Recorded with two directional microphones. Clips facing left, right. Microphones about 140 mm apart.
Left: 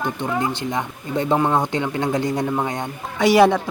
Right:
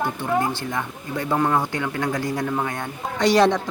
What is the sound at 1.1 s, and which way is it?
Speech, 25° left (ahead or behind).